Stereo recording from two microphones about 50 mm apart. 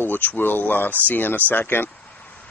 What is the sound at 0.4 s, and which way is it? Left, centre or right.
Speech, left.